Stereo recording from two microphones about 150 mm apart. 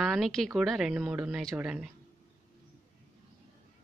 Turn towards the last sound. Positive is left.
turn(degrees=-5)  # may be behind; listen again after turning